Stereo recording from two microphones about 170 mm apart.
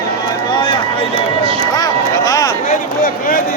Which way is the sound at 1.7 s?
20° left (ahead or behind).